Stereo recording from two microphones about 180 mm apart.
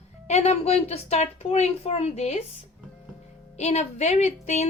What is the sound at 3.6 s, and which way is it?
A woman's voice, 40° left (ahead or behind).